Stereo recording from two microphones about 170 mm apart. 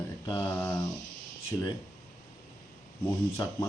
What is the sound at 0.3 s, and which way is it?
Speech, 25° left (ahead or behind).